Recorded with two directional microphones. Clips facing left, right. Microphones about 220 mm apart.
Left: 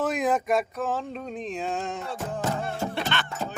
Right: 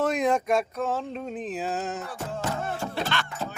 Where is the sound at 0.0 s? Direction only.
Centre (ahead or behind).